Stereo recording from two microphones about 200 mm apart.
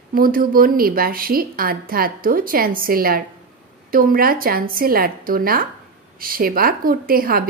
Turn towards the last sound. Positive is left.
turn(degrees=-45)  # may be behind; listen again after turning